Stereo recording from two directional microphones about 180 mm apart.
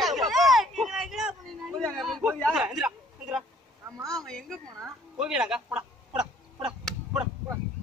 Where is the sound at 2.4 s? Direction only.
5° right (ahead or behind).